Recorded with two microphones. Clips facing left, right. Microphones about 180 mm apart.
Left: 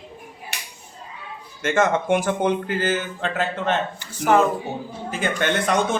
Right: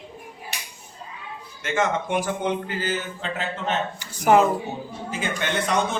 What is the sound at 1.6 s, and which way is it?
A man's voice, 50° left (ahead or behind).